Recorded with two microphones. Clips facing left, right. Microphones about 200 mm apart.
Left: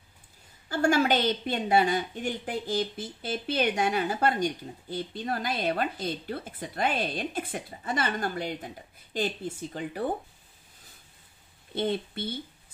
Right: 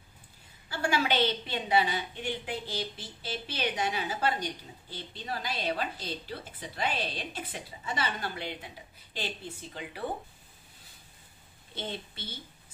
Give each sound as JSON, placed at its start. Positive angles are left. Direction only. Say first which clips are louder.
{"t": 0.7, "sound": "a woman's voice", "louder": "left 6 dB", "side_deg": 45}
{"t": 11.7, "sound": "a woman's voice", "louder": "left 10 dB", "side_deg": 55}